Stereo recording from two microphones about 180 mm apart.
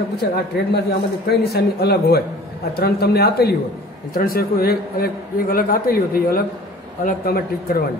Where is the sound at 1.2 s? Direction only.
65° left (ahead or behind).